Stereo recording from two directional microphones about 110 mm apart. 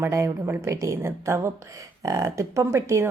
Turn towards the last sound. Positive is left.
turn(degrees=-25)  # may be behind; listen again after turning